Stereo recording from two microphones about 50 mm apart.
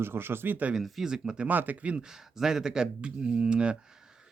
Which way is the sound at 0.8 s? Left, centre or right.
Centre.